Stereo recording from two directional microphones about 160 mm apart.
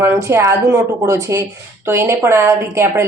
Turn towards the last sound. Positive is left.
turn(degrees=-15)  # may be behind; listen again after turning